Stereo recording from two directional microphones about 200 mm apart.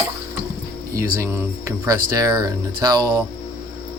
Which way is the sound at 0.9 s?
15° right (ahead or behind).